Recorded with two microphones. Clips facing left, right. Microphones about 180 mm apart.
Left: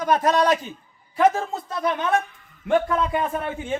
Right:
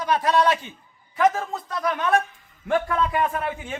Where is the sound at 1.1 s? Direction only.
30° left (ahead or behind).